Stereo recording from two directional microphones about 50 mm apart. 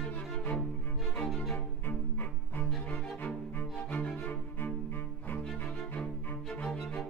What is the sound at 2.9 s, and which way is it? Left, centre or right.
Cello, left.